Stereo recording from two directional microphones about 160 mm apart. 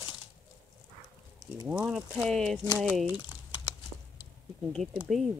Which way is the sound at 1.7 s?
5° right (ahead or behind).